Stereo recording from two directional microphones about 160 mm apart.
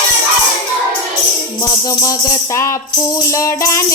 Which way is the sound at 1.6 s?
20° left (ahead or behind).